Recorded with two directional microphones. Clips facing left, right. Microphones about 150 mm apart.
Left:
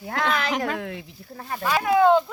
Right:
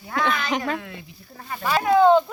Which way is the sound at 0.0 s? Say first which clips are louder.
Even; 70° left (ahead or behind).